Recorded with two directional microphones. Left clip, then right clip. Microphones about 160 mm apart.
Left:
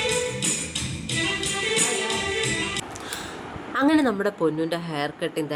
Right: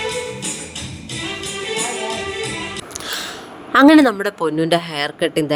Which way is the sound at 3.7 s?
65° right (ahead or behind).